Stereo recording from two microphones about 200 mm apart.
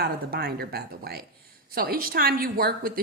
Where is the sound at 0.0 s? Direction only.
50° right (ahead or behind).